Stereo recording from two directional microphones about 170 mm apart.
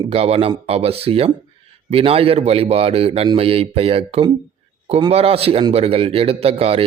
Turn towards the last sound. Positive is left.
turn(degrees=-35)  # may be behind; listen again after turning